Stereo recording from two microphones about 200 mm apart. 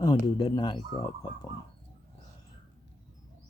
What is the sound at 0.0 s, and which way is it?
Speech, 20° left (ahead or behind).